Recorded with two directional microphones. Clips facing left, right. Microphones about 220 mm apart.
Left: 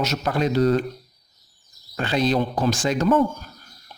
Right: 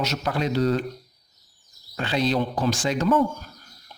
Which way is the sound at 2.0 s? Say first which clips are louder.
Left 2 dB; 45° left (ahead or behind).